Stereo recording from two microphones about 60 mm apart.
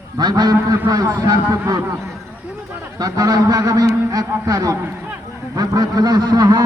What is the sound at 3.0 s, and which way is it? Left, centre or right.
A man's voice, right.